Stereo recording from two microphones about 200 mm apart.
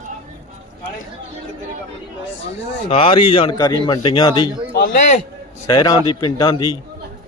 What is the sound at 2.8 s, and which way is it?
Speech, 30° left (ahead or behind).